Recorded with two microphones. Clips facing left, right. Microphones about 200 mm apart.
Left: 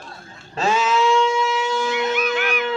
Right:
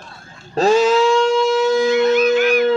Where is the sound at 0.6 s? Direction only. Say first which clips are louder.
Right 7 dB; 35° right (ahead or behind).